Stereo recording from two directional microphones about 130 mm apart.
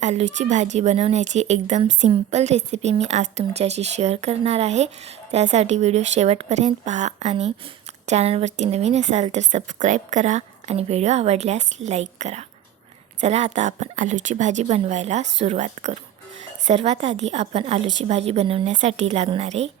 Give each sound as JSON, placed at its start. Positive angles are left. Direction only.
{"t": 0.0, "sound": "a woman's voice", "side_deg": -60}
{"t": 18.6, "sound": "a woman's voice", "side_deg": -65}